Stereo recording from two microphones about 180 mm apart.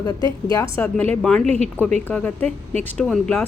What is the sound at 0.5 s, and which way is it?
Speech, 15° left (ahead or behind).